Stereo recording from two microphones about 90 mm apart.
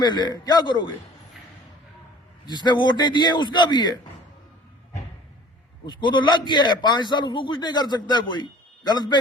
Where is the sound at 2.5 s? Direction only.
55° left (ahead or behind).